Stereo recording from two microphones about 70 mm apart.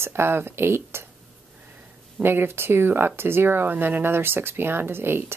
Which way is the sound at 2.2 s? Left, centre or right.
Right.